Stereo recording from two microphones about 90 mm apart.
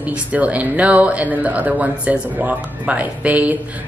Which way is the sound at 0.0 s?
15° right (ahead or behind).